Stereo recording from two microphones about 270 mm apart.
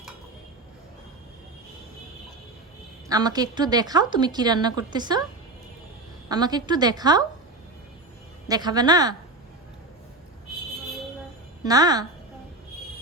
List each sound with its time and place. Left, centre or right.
3.1 s a woman's voice: centre
6.2 s a woman's voice: centre
8.4 s a woman's voice: centre
11.6 s a woman's voice: centre